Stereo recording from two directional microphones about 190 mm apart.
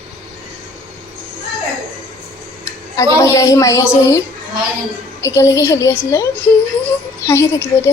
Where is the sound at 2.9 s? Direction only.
15° left (ahead or behind).